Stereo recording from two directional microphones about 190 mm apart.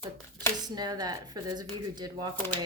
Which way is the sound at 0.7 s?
20° right (ahead or behind).